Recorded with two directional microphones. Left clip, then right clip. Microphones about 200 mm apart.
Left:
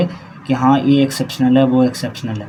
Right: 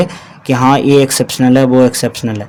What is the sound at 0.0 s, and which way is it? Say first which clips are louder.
Speech: right 5 dB; 45° right (ahead or behind).